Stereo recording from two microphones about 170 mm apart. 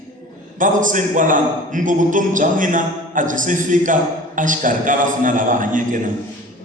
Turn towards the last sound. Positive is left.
turn(degrees=-50)  # may be behind; listen again after turning